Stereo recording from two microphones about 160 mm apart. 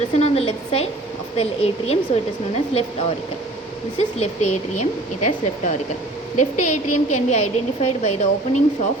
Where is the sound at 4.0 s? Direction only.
45° left (ahead or behind).